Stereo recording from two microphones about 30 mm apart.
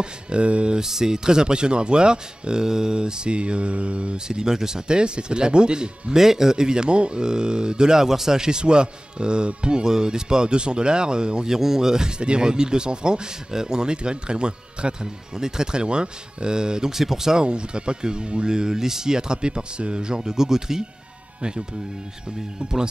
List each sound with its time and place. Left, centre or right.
0.0 s speech: right
0.7 s speech: centre; by 4.2 s right
4.3 s speech: right
4.8 s speech: right
6.1 s speech: centre
8.4 s speech: right
9.8 s speech: right
11.5 s speech: centre
12.2 s speech: right
16.9 s speech: centre
17.4 s speech: right
21.4 s speech: right